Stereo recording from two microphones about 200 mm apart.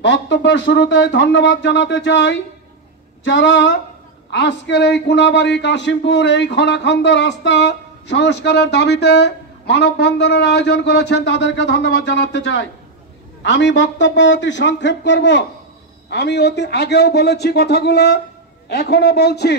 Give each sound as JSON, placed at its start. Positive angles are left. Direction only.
{"t": 0.0, "sound": "a man's voice", "side_deg": 65}